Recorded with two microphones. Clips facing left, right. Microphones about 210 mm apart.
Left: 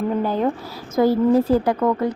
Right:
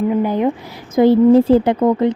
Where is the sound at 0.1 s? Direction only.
15° right (ahead or behind).